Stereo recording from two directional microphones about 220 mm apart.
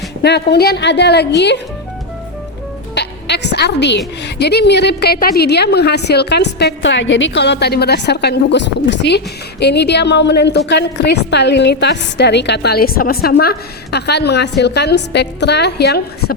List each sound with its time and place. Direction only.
0.2 s a woman's voice: 50° left (ahead or behind)
2.9 s a woman's voice: 50° left (ahead or behind)